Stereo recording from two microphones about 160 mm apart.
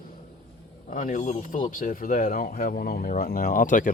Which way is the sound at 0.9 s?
55° left (ahead or behind).